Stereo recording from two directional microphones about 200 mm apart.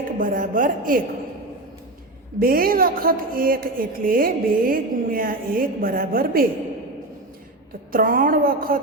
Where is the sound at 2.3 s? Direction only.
45° right (ahead or behind).